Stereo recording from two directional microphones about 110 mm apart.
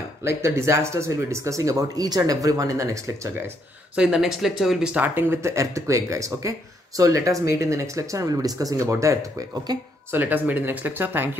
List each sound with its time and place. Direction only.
0.2 s speech: 25° right (ahead or behind)
3.9 s speech: 5° right (ahead or behind); by 9.2 s 25° right (ahead or behind)
9.7 s speech: 40° right (ahead or behind)
10.1 s speech: 15° right (ahead or behind)